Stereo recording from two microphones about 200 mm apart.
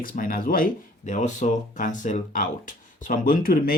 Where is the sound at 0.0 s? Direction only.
45° left (ahead or behind).